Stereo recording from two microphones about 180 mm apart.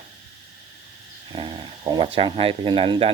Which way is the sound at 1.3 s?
25° right (ahead or behind).